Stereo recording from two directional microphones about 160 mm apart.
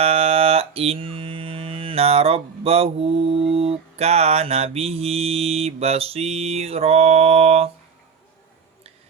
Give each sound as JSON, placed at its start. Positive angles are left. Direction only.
{"t": 0.0, "sound": "music", "side_deg": -40}